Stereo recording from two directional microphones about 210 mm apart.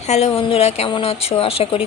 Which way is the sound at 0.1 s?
30° left (ahead or behind).